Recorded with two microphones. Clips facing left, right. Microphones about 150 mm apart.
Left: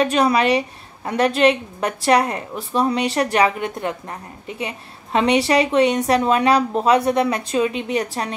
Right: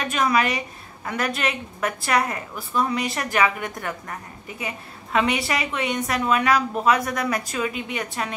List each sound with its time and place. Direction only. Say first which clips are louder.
0.0 s a woman's voice: left 5 dB; 30° left (ahead or behind)